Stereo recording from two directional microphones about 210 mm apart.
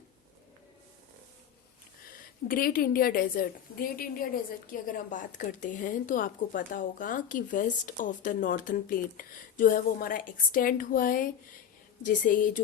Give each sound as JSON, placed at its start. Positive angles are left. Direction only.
{"t": 2.5, "sound": "a woman's voice", "side_deg": 45}